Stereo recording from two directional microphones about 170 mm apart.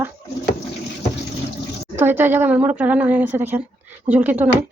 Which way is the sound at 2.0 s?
10° right (ahead or behind).